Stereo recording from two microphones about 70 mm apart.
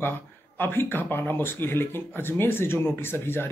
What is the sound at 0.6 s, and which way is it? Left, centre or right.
Speech, left.